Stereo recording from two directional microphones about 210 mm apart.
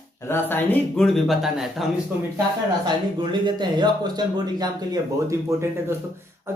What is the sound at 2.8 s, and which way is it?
A man's voice, 20° right (ahead or behind).